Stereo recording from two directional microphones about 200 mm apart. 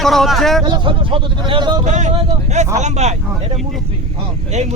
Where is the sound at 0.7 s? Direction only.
25° right (ahead or behind).